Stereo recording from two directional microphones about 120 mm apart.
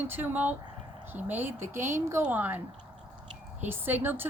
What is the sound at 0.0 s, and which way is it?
A woman's voice, 15° right (ahead or behind).